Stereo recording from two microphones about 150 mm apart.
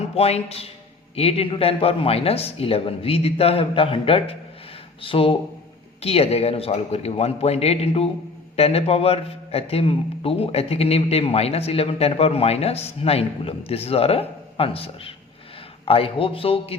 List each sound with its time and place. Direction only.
0.1 s a man's voice: 40° left (ahead or behind)